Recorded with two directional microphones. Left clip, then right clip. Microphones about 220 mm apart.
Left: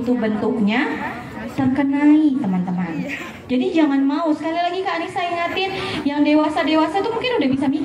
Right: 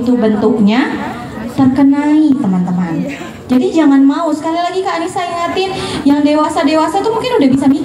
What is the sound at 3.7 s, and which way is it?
A woman's voice, 15° right (ahead or behind).